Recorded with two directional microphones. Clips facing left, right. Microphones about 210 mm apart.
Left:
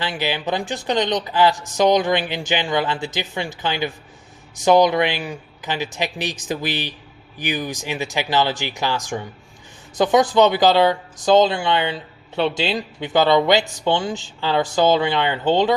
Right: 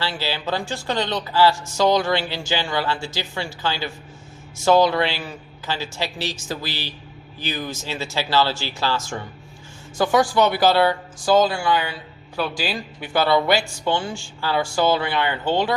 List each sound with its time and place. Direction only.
0.0 s speech: 15° left (ahead or behind)